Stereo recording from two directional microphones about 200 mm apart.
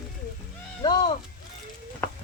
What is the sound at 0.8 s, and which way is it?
Speech, 25° left (ahead or behind).